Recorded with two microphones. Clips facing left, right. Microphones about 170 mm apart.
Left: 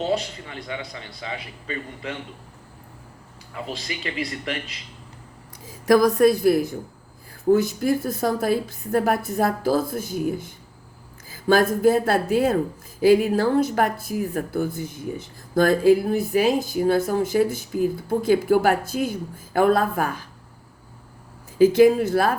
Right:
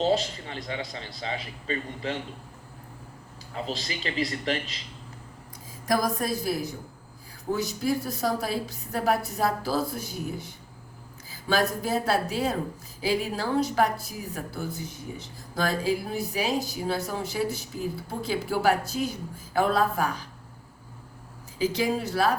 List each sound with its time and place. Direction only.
0.0 s a man's voice: 35° right (ahead or behind)
3.5 s a man's voice: 35° right (ahead or behind)
5.9 s a woman's voice: 65° left (ahead or behind)
21.6 s a woman's voice: 55° left (ahead or behind)